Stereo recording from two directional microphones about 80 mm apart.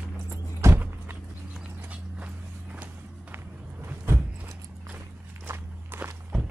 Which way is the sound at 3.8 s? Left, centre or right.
Right.